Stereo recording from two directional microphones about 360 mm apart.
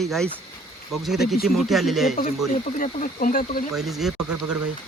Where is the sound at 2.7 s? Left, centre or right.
Left.